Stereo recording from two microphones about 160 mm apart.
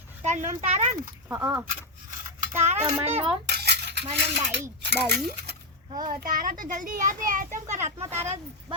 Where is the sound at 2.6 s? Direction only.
45° right (ahead or behind).